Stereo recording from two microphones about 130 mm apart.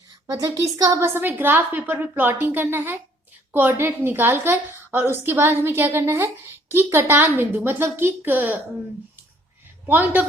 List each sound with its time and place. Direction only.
0.3 s a woman's voice: 25° right (ahead or behind)
9.8 s a woman's voice: 15° right (ahead or behind)